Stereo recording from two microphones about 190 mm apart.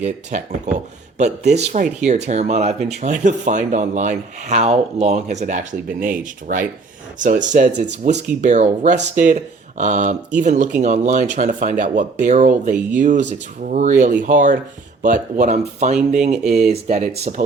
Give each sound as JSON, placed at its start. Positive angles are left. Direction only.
{"t": 0.0, "sound": "speech", "side_deg": -40}